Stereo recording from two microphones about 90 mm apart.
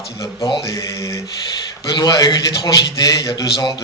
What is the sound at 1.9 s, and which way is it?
A man's voice, 50° left (ahead or behind).